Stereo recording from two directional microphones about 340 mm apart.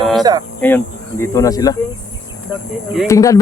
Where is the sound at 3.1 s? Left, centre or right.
Centre.